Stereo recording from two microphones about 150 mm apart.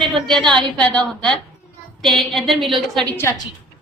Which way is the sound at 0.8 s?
5° left (ahead or behind).